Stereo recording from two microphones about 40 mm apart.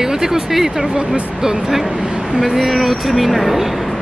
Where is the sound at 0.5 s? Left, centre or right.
Centre.